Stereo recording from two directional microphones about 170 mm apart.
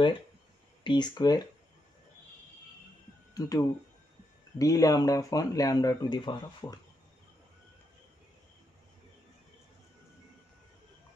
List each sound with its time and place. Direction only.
0.8 s speech: 25° left (ahead or behind)
3.3 s speech: 20° left (ahead or behind)